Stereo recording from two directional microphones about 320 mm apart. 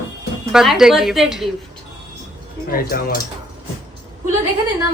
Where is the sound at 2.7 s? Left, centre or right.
Left.